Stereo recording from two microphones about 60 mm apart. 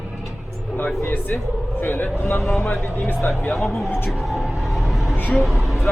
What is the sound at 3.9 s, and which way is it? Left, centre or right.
Speech, left.